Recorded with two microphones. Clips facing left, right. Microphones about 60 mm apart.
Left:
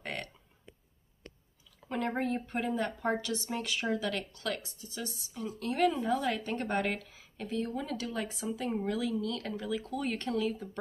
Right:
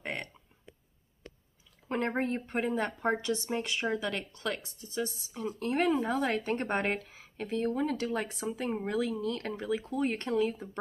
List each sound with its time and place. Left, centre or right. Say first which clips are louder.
0.0 s burping: right 2 dB; right
1.9 s speech: right 1 dB; right